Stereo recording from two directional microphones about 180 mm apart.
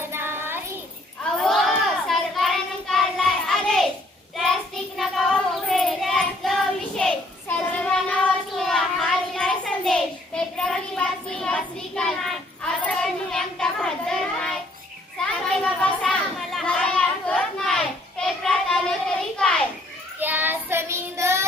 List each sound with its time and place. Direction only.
0.0 s child singing: 10° right (ahead or behind)
1.4 s child singing: centre (ahead or behind)
15.6 s chatter: 5° left (ahead or behind)
19.4 s children playing: 5° left (ahead or behind)
20.1 s child singing: 10° right (ahead or behind)